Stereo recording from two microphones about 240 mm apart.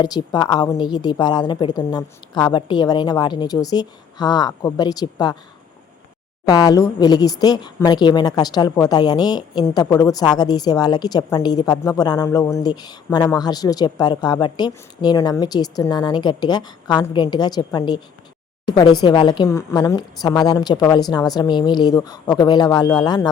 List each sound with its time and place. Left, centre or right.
0.0 s a woman's voice: centre
6.5 s a woman's voice: centre